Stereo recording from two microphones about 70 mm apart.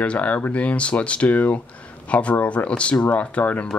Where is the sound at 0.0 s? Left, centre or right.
Centre.